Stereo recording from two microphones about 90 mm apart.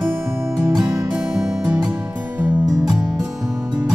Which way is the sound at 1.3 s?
10° right (ahead or behind).